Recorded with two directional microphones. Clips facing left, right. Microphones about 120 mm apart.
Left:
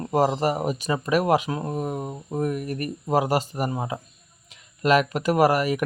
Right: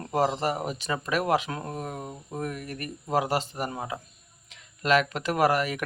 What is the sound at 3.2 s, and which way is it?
Speech, 10° left (ahead or behind).